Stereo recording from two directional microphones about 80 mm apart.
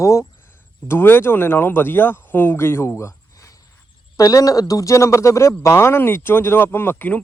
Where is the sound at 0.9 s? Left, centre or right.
Left.